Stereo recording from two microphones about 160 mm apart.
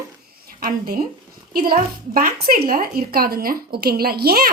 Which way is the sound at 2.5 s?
70° right (ahead or behind).